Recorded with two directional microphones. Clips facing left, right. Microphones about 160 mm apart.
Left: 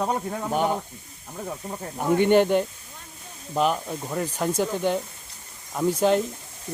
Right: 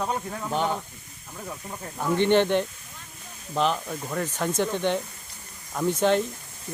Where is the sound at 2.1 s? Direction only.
10° left (ahead or behind).